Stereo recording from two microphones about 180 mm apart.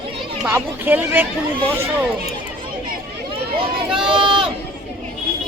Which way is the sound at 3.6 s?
30° right (ahead or behind).